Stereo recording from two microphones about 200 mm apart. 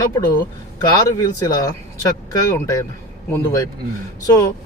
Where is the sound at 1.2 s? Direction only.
20° left (ahead or behind).